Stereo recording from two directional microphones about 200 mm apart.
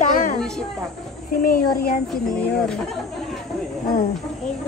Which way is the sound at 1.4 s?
50° left (ahead or behind).